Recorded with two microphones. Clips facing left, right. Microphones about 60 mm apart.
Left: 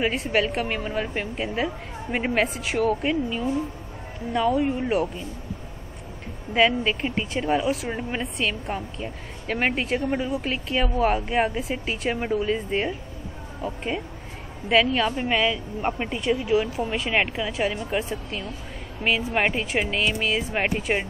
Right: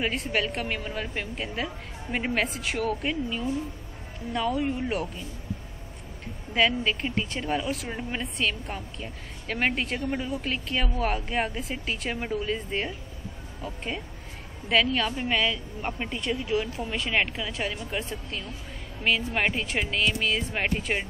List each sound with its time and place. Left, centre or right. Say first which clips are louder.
0.0 s speech: left 4 dB; centre
6.5 s speech: left 4 dB; centre
14.7 s speech: left 4 dB; centre
19.0 s speech: left 3 dB; centre